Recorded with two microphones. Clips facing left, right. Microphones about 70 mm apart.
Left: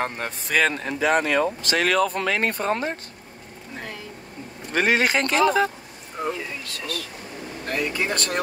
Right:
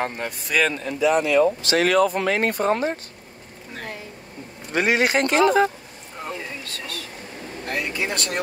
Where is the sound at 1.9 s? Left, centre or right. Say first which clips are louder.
Right 3 dB; right.